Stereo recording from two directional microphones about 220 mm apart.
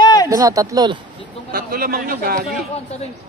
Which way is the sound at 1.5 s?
40° right (ahead or behind).